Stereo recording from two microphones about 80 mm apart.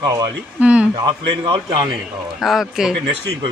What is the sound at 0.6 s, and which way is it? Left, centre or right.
Speech, centre.